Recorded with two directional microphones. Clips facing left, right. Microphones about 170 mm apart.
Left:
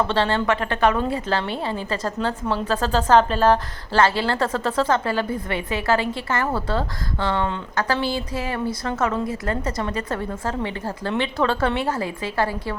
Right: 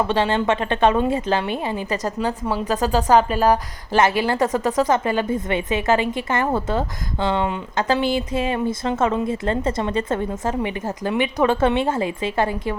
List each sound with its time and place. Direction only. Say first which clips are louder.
0.1 s a woman's voice: right 2 dB; 15° right (ahead or behind)